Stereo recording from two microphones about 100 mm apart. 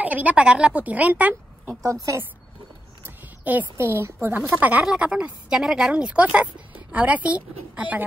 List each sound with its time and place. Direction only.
0.0 s speech: 15° right (ahead or behind)
1.8 s a woman's voice: 30° right (ahead or behind)
3.4 s a woman's voice: 20° right (ahead or behind)